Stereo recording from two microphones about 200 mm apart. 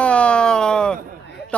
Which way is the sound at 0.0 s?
5° left (ahead or behind).